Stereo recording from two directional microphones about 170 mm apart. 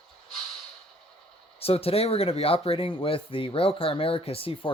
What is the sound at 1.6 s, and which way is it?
Speech, 35° left (ahead or behind).